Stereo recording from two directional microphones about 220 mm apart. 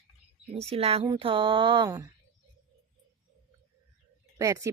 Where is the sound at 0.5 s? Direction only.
25° right (ahead or behind).